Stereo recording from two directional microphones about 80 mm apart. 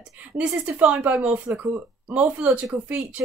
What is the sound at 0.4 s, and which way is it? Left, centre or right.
A woman's voice, centre.